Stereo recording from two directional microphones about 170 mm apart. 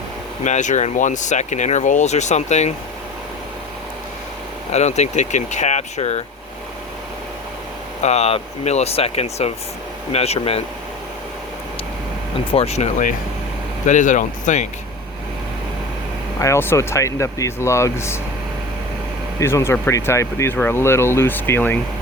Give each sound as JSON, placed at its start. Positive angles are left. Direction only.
{"t": 0.4, "sound": "speech", "side_deg": 45}
{"t": 4.7, "sound": "speech", "side_deg": 40}
{"t": 8.0, "sound": "speech", "side_deg": 40}
{"t": 12.5, "sound": "speech", "side_deg": 35}
{"t": 16.4, "sound": "speech", "side_deg": 15}
{"t": 19.4, "sound": "speech", "side_deg": 15}